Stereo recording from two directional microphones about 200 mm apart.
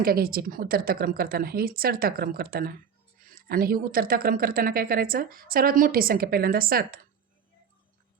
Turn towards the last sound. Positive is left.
turn(degrees=-45)  # may be behind; listen again after turning